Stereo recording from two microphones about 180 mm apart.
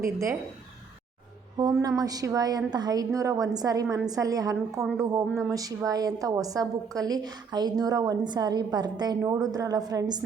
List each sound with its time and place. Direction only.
0.0 s speech: 15° right (ahead or behind)
1.5 s a woman's voice: 20° right (ahead or behind)